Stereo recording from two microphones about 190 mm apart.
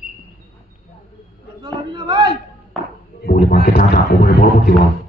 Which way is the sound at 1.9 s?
25° right (ahead or behind).